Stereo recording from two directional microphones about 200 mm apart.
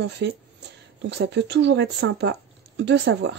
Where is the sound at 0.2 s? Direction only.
60° right (ahead or behind).